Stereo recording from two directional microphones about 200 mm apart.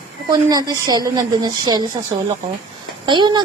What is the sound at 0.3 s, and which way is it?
A woman's voice, 20° right (ahead or behind).